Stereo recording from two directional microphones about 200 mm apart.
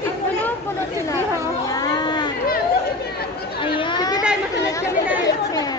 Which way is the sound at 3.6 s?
25° left (ahead or behind).